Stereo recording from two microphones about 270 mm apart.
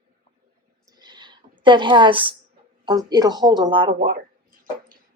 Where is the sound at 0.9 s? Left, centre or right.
Centre.